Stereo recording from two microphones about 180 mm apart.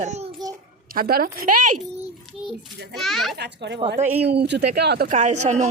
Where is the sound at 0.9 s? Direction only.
55° right (ahead or behind).